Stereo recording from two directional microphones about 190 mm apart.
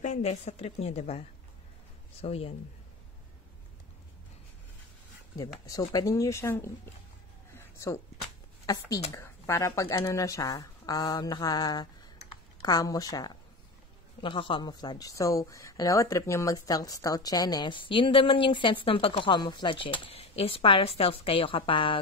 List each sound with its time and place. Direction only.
0.0 s a woman's voice: 35° left (ahead or behind)
2.2 s a woman's voice: 30° left (ahead or behind)
5.7 s speech: 20° left (ahead or behind)
7.5 s a sound: 15° left (ahead or behind)
8.6 s speech: 20° left (ahead or behind)